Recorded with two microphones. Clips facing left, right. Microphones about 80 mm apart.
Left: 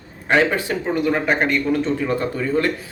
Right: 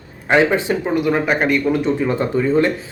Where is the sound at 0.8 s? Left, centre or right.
Centre.